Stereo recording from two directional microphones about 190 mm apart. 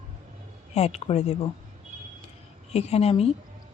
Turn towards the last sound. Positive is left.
turn(degrees=30)  # may be behind; listen again after turning